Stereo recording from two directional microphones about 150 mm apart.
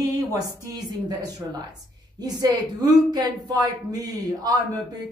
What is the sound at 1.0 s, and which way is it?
A woman's voice, 25° right (ahead or behind).